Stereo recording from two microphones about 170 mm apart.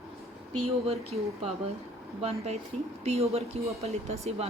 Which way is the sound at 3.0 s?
35° right (ahead or behind).